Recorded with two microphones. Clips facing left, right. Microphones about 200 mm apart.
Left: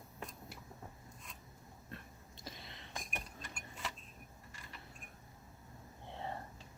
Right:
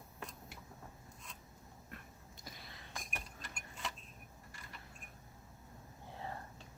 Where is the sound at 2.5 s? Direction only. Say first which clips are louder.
Left 3 dB; 20° left (ahead or behind).